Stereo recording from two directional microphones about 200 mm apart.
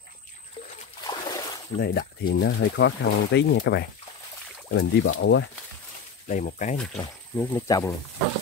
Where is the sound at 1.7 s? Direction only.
45° left (ahead or behind); by 5.4 s 65° left (ahead or behind).